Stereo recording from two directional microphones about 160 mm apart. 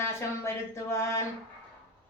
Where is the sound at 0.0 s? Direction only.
15° left (ahead or behind).